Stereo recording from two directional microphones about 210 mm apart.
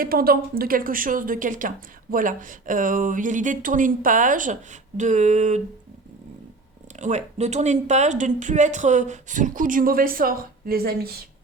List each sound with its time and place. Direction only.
0.0 s a woman's voice: 45° right (ahead or behind)
7.0 s a woman's voice: 35° right (ahead or behind)